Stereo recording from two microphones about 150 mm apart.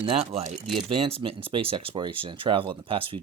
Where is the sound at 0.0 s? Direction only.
40° right (ahead or behind).